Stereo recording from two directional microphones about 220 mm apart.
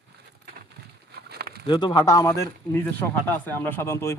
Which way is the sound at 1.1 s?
45° right (ahead or behind).